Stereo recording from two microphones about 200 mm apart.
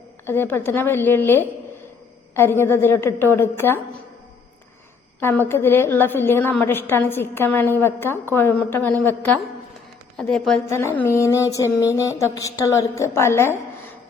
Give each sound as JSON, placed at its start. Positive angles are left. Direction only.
{"t": 0.3, "sound": "a woman's voice", "side_deg": 10}
{"t": 5.2, "sound": "a woman's voice", "side_deg": 10}
{"t": 10.2, "sound": "a woman's voice", "side_deg": 5}